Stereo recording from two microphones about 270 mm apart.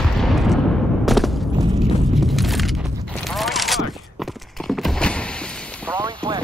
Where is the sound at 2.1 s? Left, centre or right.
Centre.